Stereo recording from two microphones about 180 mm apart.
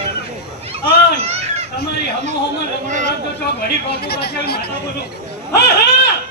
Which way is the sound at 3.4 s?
60° left (ahead or behind).